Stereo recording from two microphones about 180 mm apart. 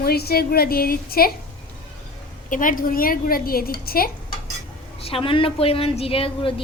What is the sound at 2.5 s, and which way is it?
A woman's voice, 50° left (ahead or behind).